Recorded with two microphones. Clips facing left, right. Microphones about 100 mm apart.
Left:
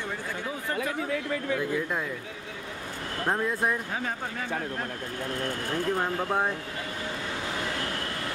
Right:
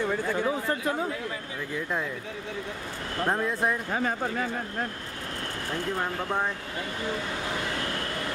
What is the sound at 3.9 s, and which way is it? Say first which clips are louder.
Speech: right 4 dB; 45° right (ahead or behind).